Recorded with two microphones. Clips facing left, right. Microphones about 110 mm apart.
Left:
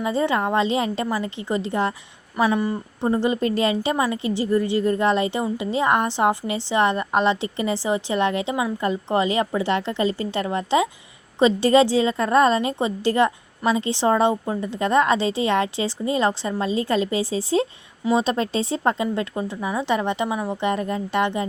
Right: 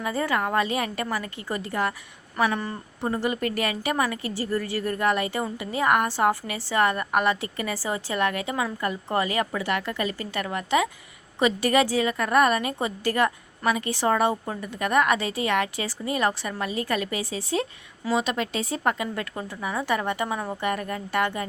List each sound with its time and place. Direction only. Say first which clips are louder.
0.0 s a woman's voice: left 4 dB; 25° left (ahead or behind)
2.4 s speech: left 4 dB; 15° left (ahead or behind)
3.1 s a woman's voice: left 5 dB; 25° left (ahead or behind)